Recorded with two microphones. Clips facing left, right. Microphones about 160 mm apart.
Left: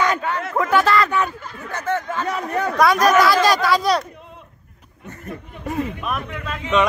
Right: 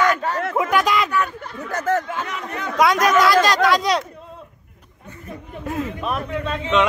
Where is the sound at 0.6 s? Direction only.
10° right (ahead or behind).